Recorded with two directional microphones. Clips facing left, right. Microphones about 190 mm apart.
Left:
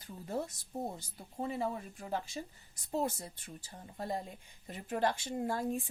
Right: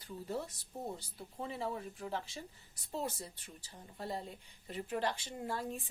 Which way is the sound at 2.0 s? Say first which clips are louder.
Left 5 dB; 45° left (ahead or behind).